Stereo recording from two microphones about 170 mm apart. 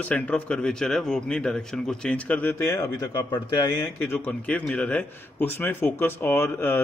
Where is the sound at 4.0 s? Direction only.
10° left (ahead or behind).